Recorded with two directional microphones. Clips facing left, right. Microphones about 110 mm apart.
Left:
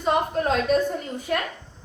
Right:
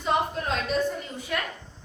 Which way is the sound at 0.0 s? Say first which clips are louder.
Left 4 dB; 45° left (ahead or behind).